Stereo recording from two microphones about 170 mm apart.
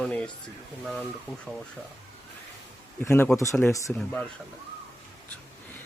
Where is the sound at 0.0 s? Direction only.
5° left (ahead or behind).